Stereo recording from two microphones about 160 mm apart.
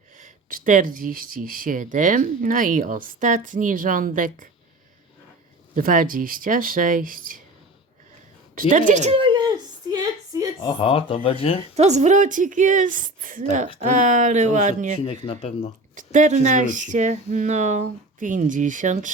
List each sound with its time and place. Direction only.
0.2 s speech: 55° right (ahead or behind)
5.7 s speech: 55° right (ahead or behind)
8.7 s speech: 50° right (ahead or behind)
9.1 s a sound: 30° right (ahead or behind)
10.6 s speech: 30° left (ahead or behind)
11.8 s speech: 45° right (ahead or behind)
15.0 s speech: 35° left (ahead or behind)
16.0 s speech: 50° right (ahead or behind)